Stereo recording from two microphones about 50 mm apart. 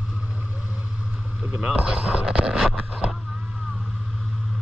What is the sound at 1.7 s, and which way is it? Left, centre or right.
Speech, right.